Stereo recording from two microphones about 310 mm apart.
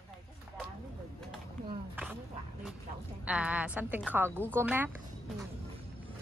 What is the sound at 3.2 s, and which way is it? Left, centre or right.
A woman's voice, centre.